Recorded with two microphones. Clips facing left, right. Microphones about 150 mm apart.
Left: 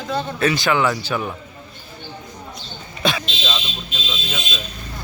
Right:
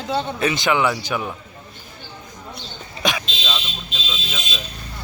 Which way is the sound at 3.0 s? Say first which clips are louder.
Left 2 dB; 15° right (ahead or behind).